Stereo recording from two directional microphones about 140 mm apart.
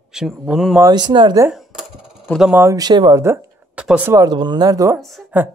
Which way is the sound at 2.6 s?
25° right (ahead or behind).